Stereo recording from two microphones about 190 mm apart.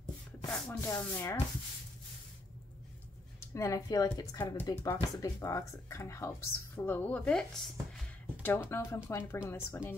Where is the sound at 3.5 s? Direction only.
15° left (ahead or behind).